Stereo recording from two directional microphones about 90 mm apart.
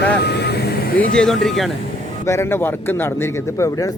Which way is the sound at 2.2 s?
30° left (ahead or behind).